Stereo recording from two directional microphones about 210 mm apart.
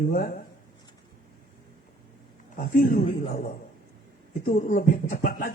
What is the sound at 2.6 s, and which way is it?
A man's voice, 40° left (ahead or behind).